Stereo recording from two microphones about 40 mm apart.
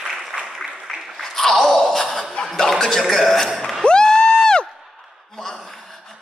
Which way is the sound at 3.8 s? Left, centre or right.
Centre.